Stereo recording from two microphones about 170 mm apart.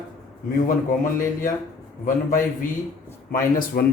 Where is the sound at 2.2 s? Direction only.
55° left (ahead or behind).